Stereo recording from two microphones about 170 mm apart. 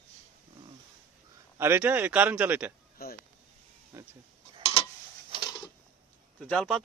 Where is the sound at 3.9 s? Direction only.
15° right (ahead or behind).